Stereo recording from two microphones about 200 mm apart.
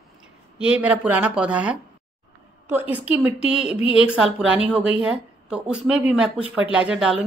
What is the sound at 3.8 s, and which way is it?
Speech, 25° left (ahead or behind).